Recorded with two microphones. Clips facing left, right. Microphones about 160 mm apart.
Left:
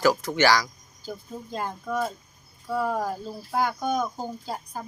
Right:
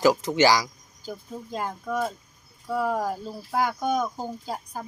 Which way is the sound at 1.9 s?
10° left (ahead or behind).